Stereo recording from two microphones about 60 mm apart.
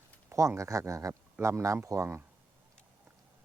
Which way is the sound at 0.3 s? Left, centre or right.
Right.